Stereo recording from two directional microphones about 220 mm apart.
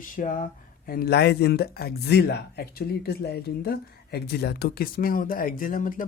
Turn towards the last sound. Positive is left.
turn(degrees=35)  # may be behind; listen again after turning